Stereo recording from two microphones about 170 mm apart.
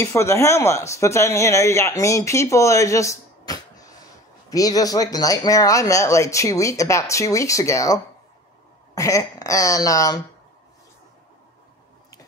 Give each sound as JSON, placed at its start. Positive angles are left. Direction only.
{"t": 0.0, "sound": "speech", "side_deg": 15}